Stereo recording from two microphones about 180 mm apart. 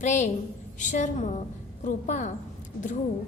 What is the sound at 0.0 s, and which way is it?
A woman's voice, 40° left (ahead or behind).